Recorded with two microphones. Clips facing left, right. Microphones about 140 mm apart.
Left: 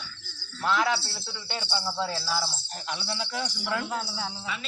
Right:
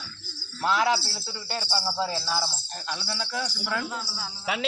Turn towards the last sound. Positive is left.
turn(degrees=65)  # may be behind; listen again after turning